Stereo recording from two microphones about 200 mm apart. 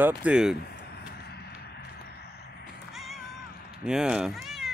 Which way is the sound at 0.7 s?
55° left (ahead or behind).